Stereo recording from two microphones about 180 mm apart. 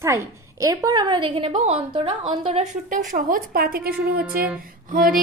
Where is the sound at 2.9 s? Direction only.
45° right (ahead or behind).